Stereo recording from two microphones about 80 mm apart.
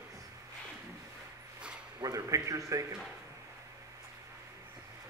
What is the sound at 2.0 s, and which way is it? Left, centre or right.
Speech, right.